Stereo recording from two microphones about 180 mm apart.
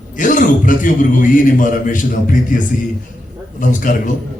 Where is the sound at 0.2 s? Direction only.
45° left (ahead or behind).